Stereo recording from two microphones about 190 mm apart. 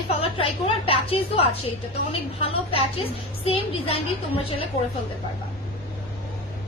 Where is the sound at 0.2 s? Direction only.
30° left (ahead or behind).